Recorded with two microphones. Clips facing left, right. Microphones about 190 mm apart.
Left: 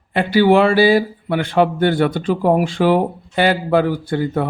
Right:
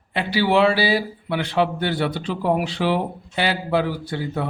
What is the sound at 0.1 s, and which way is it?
Speech, 50° left (ahead or behind).